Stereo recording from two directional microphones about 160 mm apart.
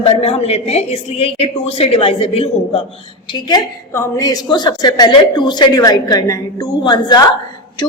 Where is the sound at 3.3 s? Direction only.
25° left (ahead or behind).